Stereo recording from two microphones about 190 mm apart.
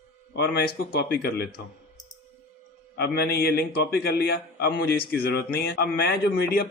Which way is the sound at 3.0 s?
55° left (ahead or behind).